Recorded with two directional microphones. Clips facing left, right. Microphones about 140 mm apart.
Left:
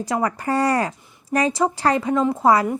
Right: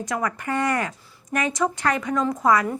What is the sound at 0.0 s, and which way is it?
Speech, 30° left (ahead or behind).